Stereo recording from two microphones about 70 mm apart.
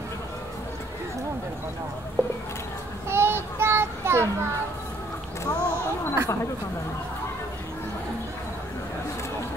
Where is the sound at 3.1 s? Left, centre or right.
Right.